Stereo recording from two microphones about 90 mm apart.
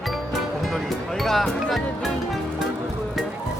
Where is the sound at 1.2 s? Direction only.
Centre (ahead or behind).